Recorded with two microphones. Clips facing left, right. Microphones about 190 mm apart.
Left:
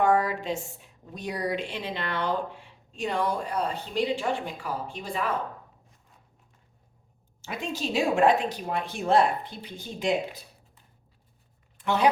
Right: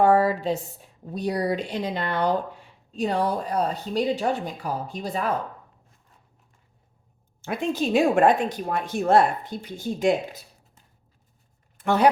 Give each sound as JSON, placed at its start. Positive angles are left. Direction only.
{"t": 0.0, "sound": "speech", "side_deg": -35}
{"t": 7.4, "sound": "a woman's voice", "side_deg": -55}